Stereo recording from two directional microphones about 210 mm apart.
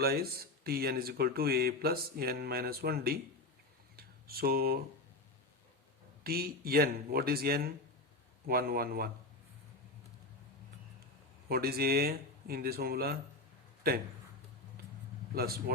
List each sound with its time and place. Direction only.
0.0 s speech: 50° right (ahead or behind)
3.9 s a sound: 45° right (ahead or behind)
6.2 s speech: 45° right (ahead or behind)
11.4 s speech: 45° right (ahead or behind)
15.4 s speech: 45° right (ahead or behind)